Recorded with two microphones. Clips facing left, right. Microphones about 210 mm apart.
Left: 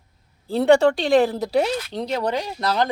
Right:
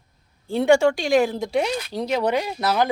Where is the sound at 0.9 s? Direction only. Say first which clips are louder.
Left 2 dB; 35° left (ahead or behind).